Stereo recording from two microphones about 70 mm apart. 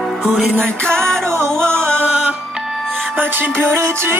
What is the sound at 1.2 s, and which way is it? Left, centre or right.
Music, right.